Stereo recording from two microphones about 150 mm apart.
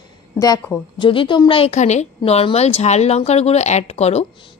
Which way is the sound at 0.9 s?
35° left (ahead or behind).